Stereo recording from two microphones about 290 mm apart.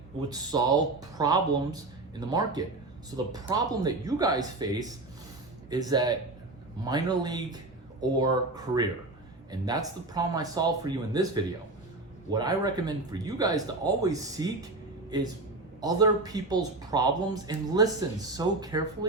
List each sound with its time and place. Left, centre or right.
0.2 s speech: centre
15.8 s speech: centre